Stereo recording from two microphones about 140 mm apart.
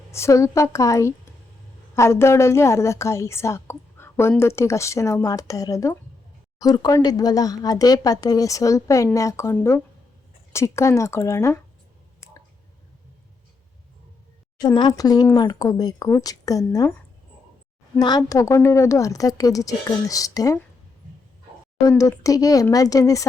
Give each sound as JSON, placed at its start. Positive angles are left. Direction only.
{"t": 0.1, "sound": "a woman's voice", "side_deg": 20}
{"t": 14.6, "sound": "a woman's voice", "side_deg": 30}
{"t": 18.0, "sound": "a woman's voice", "side_deg": 25}
{"t": 21.8, "sound": "a woman's voice", "side_deg": 25}